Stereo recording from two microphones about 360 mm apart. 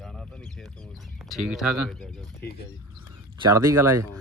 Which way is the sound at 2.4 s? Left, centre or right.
Left.